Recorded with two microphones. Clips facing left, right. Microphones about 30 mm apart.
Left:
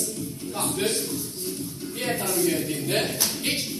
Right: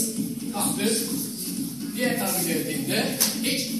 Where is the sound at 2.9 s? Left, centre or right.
Left.